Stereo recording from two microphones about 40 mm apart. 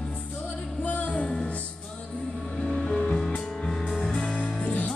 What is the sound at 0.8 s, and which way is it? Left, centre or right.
Music, left.